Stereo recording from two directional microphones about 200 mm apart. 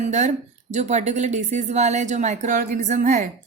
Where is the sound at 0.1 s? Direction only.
35° right (ahead or behind).